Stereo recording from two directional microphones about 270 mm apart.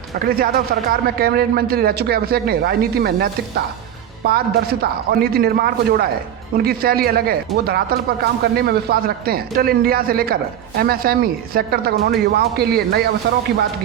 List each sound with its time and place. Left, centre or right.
0.3 s a man's voice: right